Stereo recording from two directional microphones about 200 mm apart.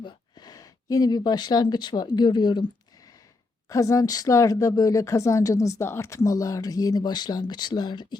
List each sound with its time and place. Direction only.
0.0 s speech: 20° left (ahead or behind)
3.7 s speech: 15° left (ahead or behind)